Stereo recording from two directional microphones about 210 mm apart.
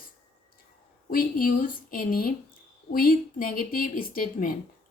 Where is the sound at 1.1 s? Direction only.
45° left (ahead or behind).